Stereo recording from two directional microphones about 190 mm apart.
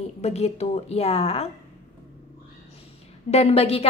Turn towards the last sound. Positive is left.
turn(degrees=30)  # may be behind; listen again after turning